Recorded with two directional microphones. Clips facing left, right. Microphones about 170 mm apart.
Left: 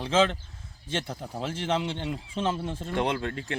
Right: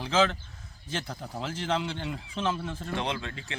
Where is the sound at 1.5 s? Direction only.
25° left (ahead or behind).